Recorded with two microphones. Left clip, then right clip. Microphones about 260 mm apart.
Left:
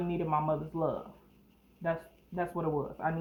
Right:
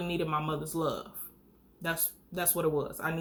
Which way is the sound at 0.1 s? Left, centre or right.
Centre.